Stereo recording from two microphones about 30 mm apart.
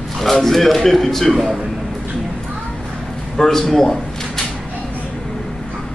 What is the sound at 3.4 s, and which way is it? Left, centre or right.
Speech, centre.